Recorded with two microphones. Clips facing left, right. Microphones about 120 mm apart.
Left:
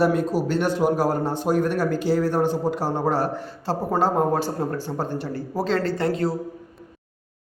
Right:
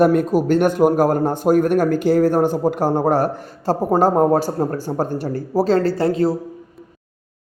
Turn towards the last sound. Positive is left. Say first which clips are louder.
# right 6 dB
turn(degrees=-35)  # may be behind; listen again after turning